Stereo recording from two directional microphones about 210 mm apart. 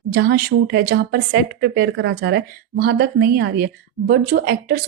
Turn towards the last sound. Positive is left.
turn(degrees=-50)  # may be behind; listen again after turning